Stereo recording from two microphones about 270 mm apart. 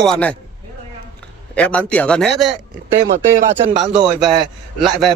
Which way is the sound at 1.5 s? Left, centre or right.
Centre.